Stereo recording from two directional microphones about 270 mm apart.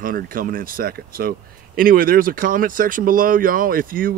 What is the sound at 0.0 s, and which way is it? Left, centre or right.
Speech, right.